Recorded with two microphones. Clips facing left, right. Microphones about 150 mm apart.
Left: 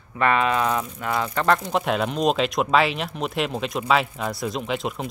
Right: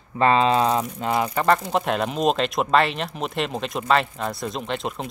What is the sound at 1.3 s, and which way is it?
Speech, centre (ahead or behind).